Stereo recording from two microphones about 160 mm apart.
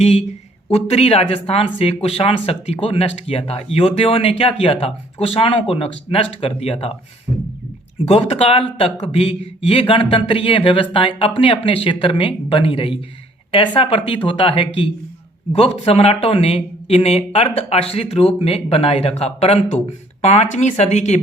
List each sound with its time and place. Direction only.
0.0 s speech: 40° left (ahead or behind)
8.0 s speech: 40° left (ahead or behind)